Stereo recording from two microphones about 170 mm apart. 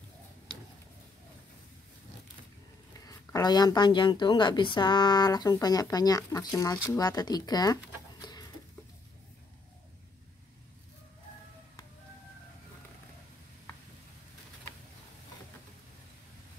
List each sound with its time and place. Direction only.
3.1 s speech: 20° left (ahead or behind)